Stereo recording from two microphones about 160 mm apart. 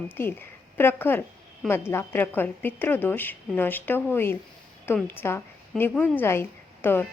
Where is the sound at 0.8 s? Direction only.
15° left (ahead or behind).